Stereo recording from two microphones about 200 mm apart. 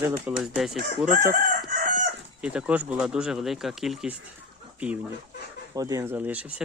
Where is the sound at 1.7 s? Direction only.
45° right (ahead or behind).